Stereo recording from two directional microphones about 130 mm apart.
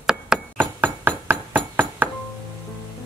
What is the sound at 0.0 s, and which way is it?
Hammer, 5° right (ahead or behind).